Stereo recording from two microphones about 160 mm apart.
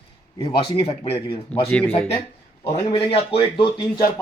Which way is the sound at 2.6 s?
40° left (ahead or behind).